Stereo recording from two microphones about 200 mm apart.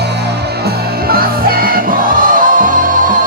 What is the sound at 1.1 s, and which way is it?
Music, 45° right (ahead or behind).